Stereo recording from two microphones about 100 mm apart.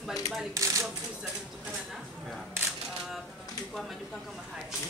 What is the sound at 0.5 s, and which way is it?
Speech, 30° right (ahead or behind).